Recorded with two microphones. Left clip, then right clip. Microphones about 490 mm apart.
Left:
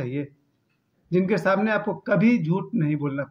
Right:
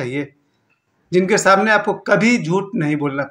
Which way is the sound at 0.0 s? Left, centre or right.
Left.